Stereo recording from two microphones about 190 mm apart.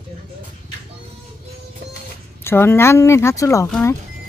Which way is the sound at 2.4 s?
10° left (ahead or behind).